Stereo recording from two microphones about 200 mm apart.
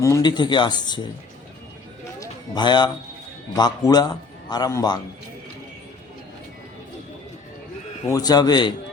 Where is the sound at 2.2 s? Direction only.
20° left (ahead or behind).